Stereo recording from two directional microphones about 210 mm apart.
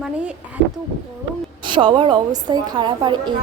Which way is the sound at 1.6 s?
25° right (ahead or behind).